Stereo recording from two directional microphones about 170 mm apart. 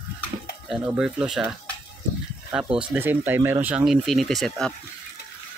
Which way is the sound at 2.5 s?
5° right (ahead or behind).